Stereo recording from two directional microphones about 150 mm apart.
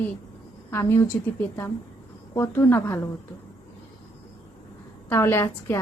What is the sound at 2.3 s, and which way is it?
Speech, 15° left (ahead or behind).